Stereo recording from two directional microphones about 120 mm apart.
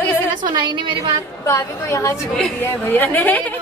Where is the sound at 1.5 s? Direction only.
25° left (ahead or behind).